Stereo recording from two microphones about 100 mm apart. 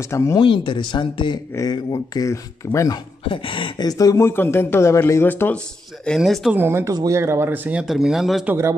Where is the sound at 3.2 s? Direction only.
60° left (ahead or behind).